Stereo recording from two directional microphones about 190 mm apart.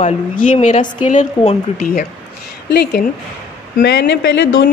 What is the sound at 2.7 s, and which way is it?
A woman's voice, 60° left (ahead or behind).